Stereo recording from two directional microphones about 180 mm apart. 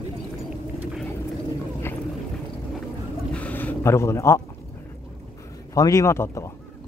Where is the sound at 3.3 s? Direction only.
10° left (ahead or behind).